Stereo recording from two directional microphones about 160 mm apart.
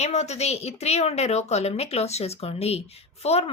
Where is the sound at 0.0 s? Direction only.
45° left (ahead or behind).